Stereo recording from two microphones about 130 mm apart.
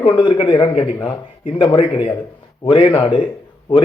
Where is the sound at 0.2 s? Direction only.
40° left (ahead or behind).